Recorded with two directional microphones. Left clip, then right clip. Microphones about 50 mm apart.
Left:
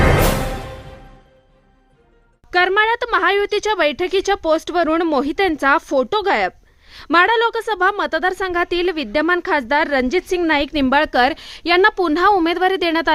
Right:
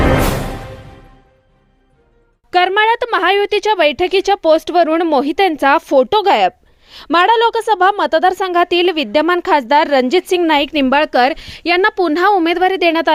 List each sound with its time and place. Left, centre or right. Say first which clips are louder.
2.5 s speech: right 3 dB; right
3.4 s speech: right 4 dB; right
10.4 s a woman's voice: right 4 dB; right
10.8 s speech: right 1 dB; right